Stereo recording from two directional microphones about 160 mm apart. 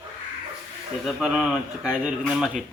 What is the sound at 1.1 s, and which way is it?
Speech, centre (ahead or behind).